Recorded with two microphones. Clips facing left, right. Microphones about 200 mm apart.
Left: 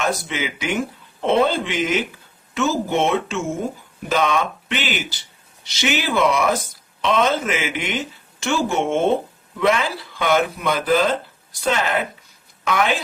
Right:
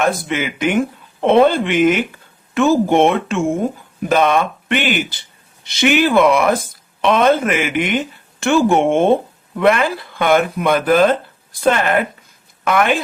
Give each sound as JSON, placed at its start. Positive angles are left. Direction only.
{"t": 0.0, "sound": "speech", "side_deg": -55}